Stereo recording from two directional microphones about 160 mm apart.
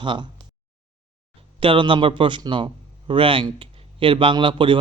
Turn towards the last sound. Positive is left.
turn(degrees=-30)  # may be behind; listen again after turning